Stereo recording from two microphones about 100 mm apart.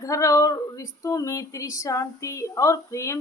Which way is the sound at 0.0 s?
30° left (ahead or behind).